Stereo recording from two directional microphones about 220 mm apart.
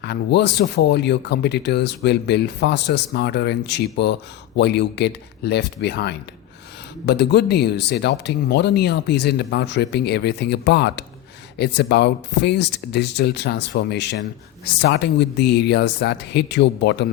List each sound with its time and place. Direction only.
0.0 s speech: 50° left (ahead or behind)